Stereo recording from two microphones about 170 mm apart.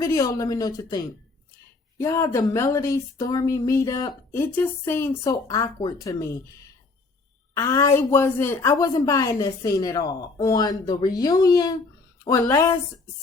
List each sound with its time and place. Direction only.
0.0 s speech: 20° left (ahead or behind)
7.5 s speech: 15° left (ahead or behind)